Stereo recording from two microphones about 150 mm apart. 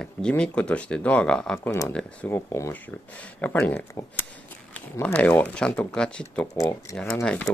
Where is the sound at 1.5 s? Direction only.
20° left (ahead or behind).